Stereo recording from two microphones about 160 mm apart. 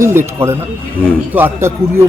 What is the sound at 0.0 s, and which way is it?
Speech, 15° right (ahead or behind).